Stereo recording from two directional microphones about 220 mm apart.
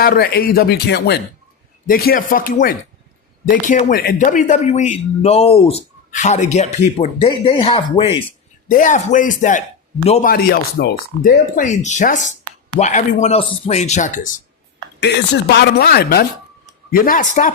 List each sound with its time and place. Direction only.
0.0 s speech: 45° left (ahead or behind); by 8.2 s 25° left (ahead or behind)
8.6 s speech: 35° left (ahead or behind)
10.3 s speech: 45° left (ahead or behind)
15.0 s speech: 50° left (ahead or behind)